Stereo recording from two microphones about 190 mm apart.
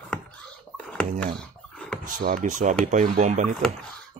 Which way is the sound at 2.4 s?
40° right (ahead or behind).